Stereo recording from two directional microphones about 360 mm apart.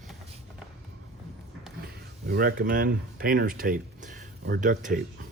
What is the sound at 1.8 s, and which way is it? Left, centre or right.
Speech, right.